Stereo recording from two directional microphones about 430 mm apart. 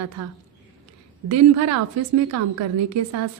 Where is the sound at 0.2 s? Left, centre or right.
Right.